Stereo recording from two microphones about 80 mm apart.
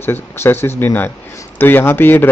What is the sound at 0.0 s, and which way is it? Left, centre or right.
A man's voice, left.